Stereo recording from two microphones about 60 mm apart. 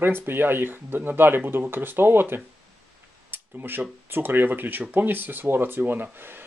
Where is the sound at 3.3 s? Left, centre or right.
Right.